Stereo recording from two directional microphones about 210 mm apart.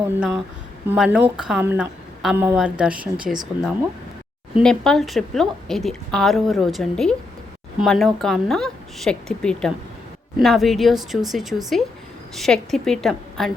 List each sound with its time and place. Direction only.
0.2 s a woman's voice: 5° right (ahead or behind)